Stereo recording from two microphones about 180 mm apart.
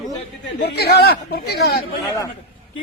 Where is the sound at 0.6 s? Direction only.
65° left (ahead or behind).